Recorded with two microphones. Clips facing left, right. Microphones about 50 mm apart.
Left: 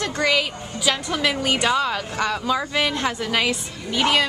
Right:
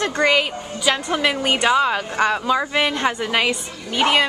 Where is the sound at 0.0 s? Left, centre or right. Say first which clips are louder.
Right 3 dB; centre.